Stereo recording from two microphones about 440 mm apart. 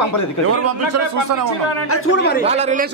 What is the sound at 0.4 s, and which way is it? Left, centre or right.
Speech, right.